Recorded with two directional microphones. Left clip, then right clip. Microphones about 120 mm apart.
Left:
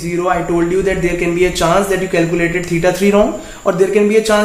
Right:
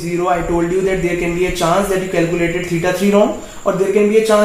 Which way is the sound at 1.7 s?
15° left (ahead or behind).